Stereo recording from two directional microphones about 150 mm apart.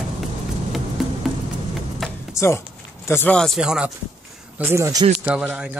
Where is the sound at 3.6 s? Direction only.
5° right (ahead or behind).